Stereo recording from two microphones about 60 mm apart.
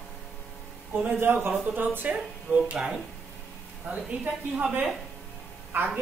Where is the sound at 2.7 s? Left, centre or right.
Centre.